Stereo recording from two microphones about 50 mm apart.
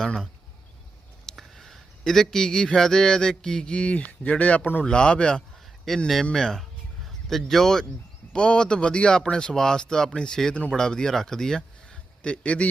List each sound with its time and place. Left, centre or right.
1.3 s a man's voice: centre; by 4.7 s left
4.8 s speech: centre
5.9 s speech: centre
8.3 s a man's voice: centre